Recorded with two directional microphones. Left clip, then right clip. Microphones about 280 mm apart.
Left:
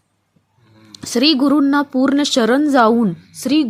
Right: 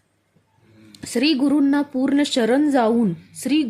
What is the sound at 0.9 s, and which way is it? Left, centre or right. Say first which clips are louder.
A woman's voice: left 5 dB; centre.